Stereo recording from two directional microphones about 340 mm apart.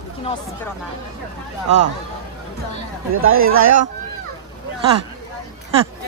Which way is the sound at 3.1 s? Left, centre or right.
Right.